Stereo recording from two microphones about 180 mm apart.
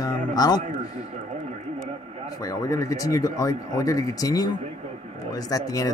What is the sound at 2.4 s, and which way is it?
Speech, 20° left (ahead or behind).